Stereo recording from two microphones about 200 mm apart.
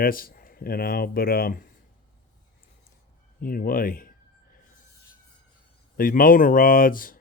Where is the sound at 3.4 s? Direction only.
45° left (ahead or behind).